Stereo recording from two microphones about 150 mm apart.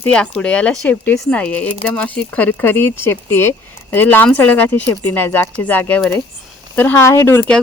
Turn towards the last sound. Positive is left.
turn(degrees=10)  # may be behind; listen again after turning